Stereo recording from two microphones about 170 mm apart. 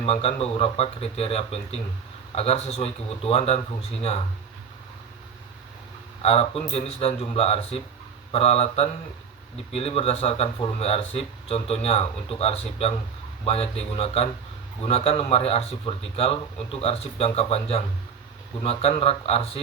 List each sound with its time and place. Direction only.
0.0 s speech: 35° left (ahead or behind)
6.2 s speech: 35° left (ahead or behind)